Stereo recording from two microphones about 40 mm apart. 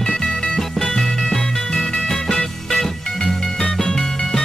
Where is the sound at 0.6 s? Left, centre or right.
Centre.